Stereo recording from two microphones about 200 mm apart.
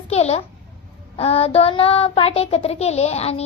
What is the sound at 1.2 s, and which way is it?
Child singing, 30° left (ahead or behind).